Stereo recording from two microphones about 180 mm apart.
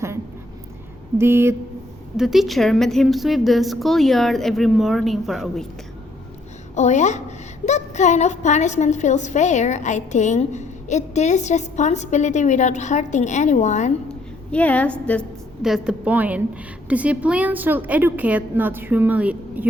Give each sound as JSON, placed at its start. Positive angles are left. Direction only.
{"t": 1.2, "sound": "a woman's voice", "side_deg": -15}
{"t": 2.1, "sound": "a woman's voice", "side_deg": 0}
{"t": 6.7, "sound": "a woman's voice", "side_deg": 40}
{"t": 14.1, "sound": "a woman's voice", "side_deg": 10}